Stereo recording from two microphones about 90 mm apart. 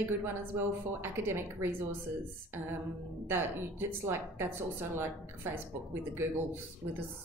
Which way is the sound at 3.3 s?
25° right (ahead or behind).